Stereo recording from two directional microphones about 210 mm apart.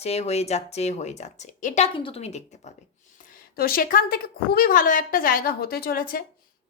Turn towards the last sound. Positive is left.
turn(degrees=45)  # may be behind; listen again after turning